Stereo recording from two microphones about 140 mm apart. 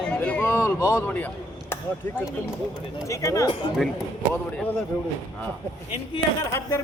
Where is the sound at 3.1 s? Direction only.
20° left (ahead or behind).